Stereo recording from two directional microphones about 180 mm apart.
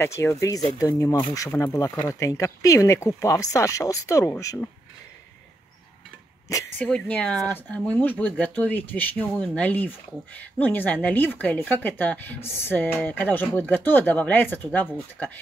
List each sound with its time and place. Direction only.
0.0 s speech: 15° left (ahead or behind)
6.5 s speech: 10° left (ahead or behind)